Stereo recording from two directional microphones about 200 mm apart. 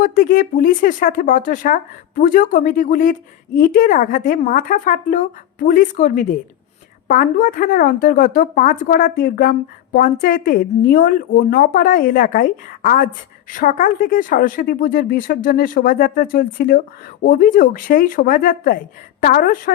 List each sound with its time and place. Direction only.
0.0 s a woman's voice: 40° left (ahead or behind)